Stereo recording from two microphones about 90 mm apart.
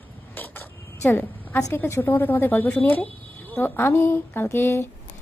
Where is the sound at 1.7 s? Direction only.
20° left (ahead or behind).